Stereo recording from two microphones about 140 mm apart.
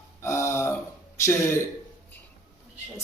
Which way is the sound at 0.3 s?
20° left (ahead or behind).